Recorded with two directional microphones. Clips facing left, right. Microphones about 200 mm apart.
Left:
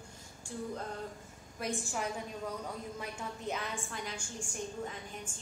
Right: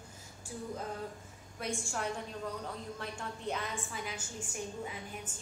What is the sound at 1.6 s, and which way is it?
A woman's voice, 5° left (ahead or behind).